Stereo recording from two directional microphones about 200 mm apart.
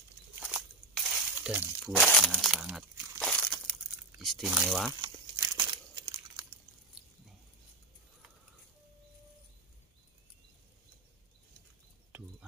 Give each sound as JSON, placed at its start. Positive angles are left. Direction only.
{"t": 0.4, "sound": "crumpling", "side_deg": -5}
{"t": 1.9, "sound": "speech", "side_deg": 5}
{"t": 3.2, "sound": "crumpling", "side_deg": 5}
{"t": 4.2, "sound": "speech", "side_deg": 0}
{"t": 5.0, "sound": "crumpling", "side_deg": -20}